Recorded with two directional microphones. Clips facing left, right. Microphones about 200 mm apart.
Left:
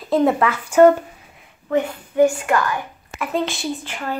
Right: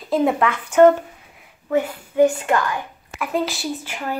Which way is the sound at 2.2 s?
20° right (ahead or behind).